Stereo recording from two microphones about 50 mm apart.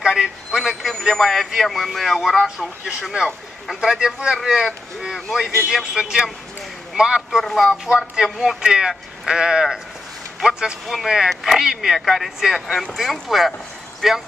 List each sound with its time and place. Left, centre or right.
0.0 s a sound: centre
0.8 s a sound: centre
1.6 s speech: centre
3.8 s speech: centre
7.2 s speech: centre
11.2 s speech: centre